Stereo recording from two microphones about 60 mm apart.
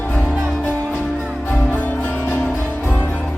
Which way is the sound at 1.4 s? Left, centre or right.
Left.